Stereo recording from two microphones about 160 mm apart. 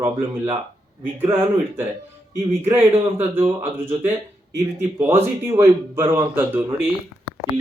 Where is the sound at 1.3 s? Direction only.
15° right (ahead or behind).